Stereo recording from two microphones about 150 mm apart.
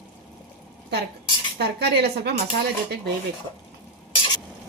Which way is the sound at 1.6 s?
90° right.